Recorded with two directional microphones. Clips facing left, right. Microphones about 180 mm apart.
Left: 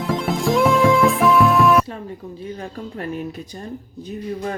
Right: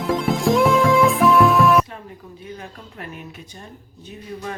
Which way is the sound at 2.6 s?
35° left (ahead or behind).